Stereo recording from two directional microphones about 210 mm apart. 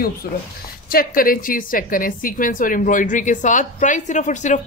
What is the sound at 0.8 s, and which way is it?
A woman's voice, 45° left (ahead or behind).